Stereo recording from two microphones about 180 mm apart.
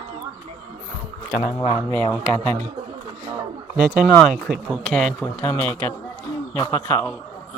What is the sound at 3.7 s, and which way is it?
Speech, 5° right (ahead or behind).